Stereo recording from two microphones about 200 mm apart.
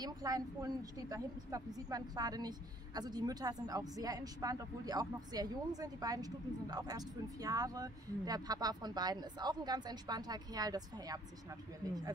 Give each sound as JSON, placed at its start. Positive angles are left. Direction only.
{"t": 0.0, "sound": "a woman's voice", "side_deg": -20}